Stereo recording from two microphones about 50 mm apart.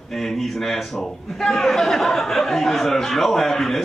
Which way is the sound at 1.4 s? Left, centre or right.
Centre.